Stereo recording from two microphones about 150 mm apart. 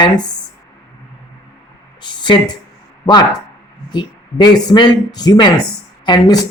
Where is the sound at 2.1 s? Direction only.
30° left (ahead or behind).